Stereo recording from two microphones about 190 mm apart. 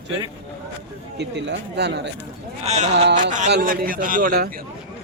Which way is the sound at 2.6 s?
35° right (ahead or behind).